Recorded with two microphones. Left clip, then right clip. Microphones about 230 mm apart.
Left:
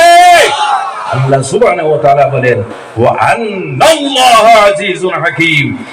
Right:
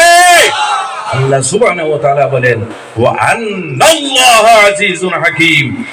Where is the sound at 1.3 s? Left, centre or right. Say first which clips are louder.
Left 2 dB; right.